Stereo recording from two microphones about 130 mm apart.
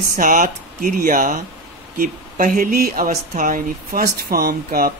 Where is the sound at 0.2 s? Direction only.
90° right.